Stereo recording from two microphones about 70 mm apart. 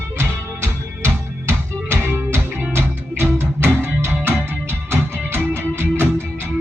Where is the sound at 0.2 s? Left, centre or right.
Right.